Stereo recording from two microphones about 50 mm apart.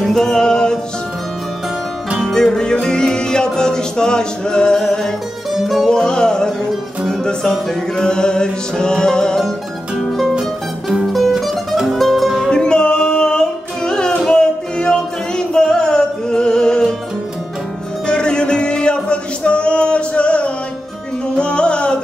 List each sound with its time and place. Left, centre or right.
0.0 s music: centre
2.3 s music: centre
5.5 s music: centre
5.9 s music: centre
8.0 s music: centre
10.0 s music: centre
12.4 s music: centre
18.0 s music: centre